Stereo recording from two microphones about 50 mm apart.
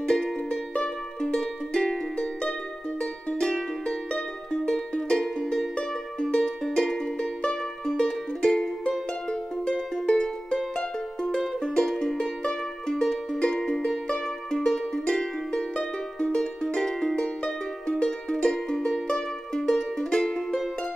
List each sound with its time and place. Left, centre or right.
0.0 s music: centre